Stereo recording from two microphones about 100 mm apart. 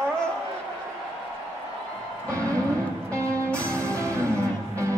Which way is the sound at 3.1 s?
30° right (ahead or behind).